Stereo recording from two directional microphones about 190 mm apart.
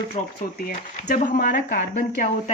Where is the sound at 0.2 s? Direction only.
40° left (ahead or behind).